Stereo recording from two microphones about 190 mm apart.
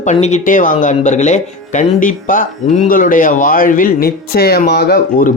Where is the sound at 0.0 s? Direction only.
35° left (ahead or behind).